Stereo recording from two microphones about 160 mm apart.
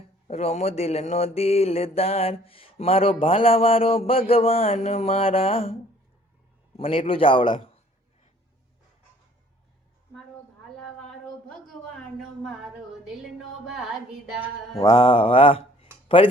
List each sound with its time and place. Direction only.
0.3 s mantra: 45° left (ahead or behind)
6.7 s a man's voice: 35° left (ahead or behind)
7.1 s mantra: 35° left (ahead or behind)
14.8 s mantra: 40° left (ahead or behind)
16.0 s speech: 35° left (ahead or behind)